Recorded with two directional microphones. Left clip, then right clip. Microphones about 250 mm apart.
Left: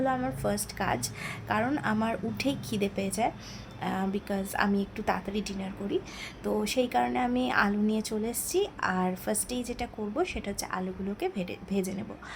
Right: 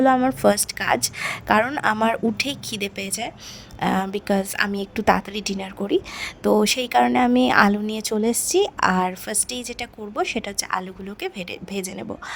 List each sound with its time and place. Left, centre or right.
0.0 s a woman's voice: right